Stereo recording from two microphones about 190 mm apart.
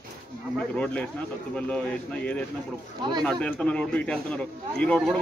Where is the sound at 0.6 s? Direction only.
5° left (ahead or behind).